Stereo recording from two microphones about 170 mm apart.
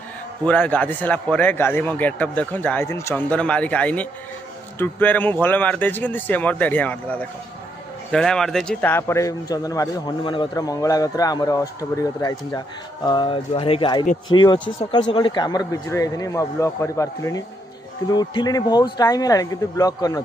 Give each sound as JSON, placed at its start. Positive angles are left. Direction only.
{"t": 0.5, "sound": "a man's voice", "side_deg": 10}